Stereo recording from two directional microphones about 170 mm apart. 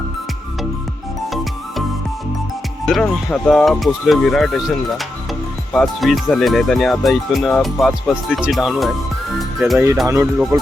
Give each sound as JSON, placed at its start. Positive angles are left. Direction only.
{"t": 2.8, "sound": "speech", "side_deg": 0}
{"t": 9.4, "sound": "music", "side_deg": 0}
{"t": 9.7, "sound": "speech", "side_deg": -15}